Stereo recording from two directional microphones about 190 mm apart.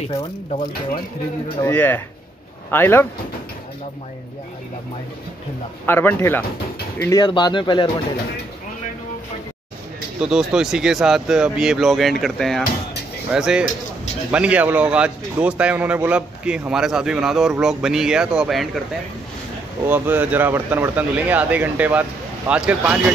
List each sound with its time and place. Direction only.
1.6 s speech: 10° left (ahead or behind)
5.9 s speech: 10° left (ahead or behind)
10.2 s speech: 5° right (ahead or behind)
19.9 s speech: 10° right (ahead or behind)